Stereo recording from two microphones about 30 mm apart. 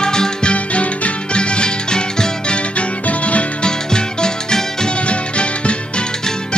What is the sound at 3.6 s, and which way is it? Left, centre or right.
Music, left.